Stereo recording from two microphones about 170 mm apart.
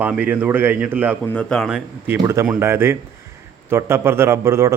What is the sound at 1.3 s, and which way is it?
Speech, 5° left (ahead or behind).